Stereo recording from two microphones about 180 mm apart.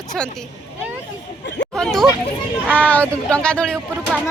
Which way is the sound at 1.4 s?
75° left (ahead or behind).